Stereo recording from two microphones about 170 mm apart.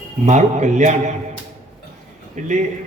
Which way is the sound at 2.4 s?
45° right (ahead or behind).